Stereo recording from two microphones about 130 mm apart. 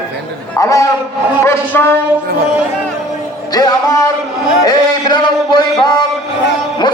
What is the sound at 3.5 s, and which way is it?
A man's voice, 30° left (ahead or behind).